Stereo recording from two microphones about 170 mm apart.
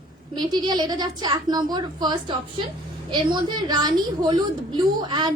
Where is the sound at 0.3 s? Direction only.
25° right (ahead or behind).